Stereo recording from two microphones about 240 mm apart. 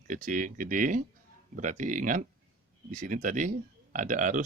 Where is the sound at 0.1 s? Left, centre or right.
Right.